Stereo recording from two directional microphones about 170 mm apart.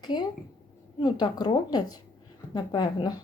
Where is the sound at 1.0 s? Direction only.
25° left (ahead or behind).